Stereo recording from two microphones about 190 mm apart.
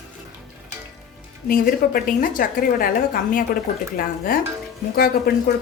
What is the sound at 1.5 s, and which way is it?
A woman's voice, 50° left (ahead or behind).